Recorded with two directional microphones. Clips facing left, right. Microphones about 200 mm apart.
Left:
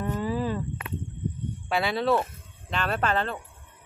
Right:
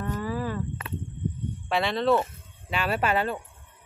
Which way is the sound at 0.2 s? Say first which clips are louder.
Left 4 dB; 20° left (ahead or behind).